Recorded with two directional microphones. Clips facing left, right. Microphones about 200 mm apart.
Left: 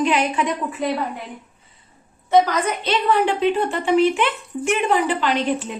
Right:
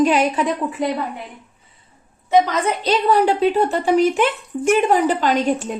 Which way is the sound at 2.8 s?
40° right (ahead or behind).